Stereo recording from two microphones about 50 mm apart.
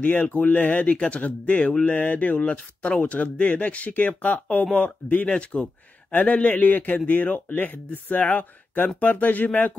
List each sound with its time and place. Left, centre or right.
0.0 s speech: left